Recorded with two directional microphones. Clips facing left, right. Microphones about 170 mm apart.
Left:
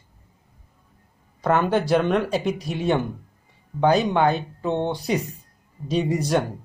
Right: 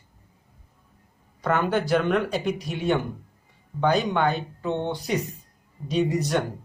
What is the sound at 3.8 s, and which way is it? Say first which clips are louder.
Speech: left 3 dB; 30° left (ahead or behind).